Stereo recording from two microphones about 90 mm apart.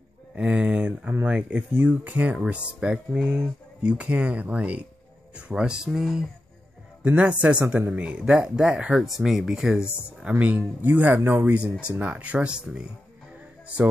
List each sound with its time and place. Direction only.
0.4 s speech: 15° right (ahead or behind)
10.4 s a man's voice: 20° right (ahead or behind)